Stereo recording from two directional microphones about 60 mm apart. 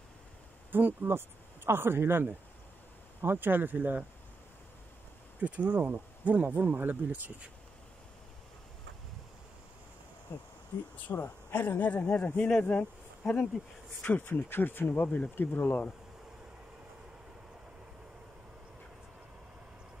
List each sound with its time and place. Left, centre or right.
0.7 s speech: right
5.4 s speech: right
11.1 s speech: left
12.0 s speech: centre
14.2 s speech: left
14.9 s speech: left